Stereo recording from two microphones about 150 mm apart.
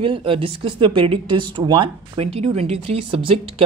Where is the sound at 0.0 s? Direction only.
35° right (ahead or behind).